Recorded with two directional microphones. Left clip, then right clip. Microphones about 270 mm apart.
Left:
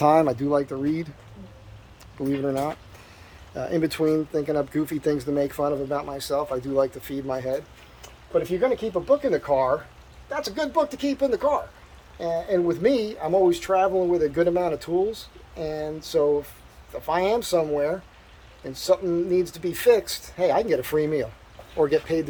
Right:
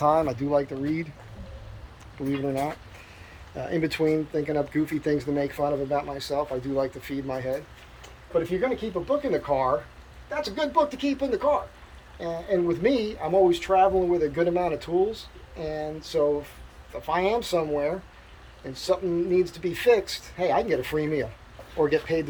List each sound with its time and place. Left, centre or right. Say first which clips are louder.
0.0 s speech: left 4 dB; left
0.3 s speech: left 1 dB; centre
2.4 s speech: left 1 dB; centre